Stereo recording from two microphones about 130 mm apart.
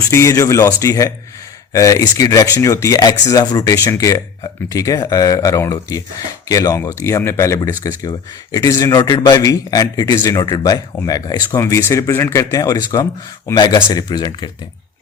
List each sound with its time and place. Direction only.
0.1 s speech: 20° left (ahead or behind)